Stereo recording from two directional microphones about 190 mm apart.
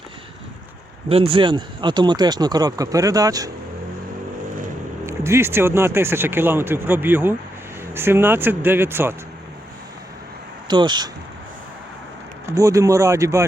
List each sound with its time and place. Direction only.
1.0 s speech: 30° right (ahead or behind)
5.0 s speech: 15° right (ahead or behind)
10.7 s speech: 25° right (ahead or behind)
12.5 s speech: 15° right (ahead or behind)